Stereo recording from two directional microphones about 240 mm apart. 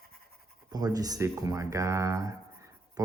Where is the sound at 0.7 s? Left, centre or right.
Centre.